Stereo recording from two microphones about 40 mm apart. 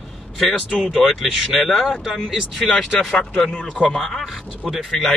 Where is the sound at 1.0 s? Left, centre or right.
Centre.